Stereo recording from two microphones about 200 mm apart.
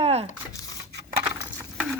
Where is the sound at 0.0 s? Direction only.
30° right (ahead or behind).